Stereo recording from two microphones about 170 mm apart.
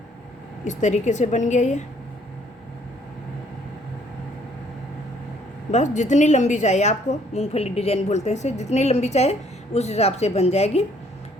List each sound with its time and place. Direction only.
0.6 s a woman's voice: 45° left (ahead or behind)
5.7 s a woman's voice: 45° left (ahead or behind)